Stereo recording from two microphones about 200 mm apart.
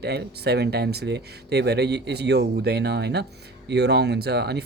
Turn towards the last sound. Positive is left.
turn(degrees=-55)  # may be behind; listen again after turning